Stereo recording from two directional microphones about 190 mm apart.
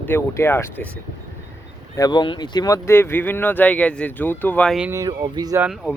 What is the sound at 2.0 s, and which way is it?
Speech, 20° left (ahead or behind).